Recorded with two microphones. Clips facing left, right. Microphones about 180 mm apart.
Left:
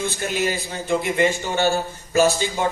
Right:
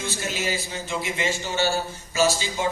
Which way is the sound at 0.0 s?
55° left (ahead or behind).